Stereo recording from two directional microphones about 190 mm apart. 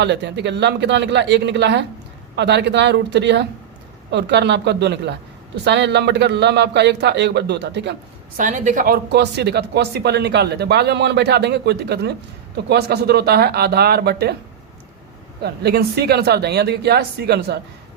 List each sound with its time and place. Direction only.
0.0 s speech: 65° right (ahead or behind)
8.4 s a woman's voice: 40° right (ahead or behind)
9.1 s speech: 60° right (ahead or behind)
15.4 s speech: 60° right (ahead or behind)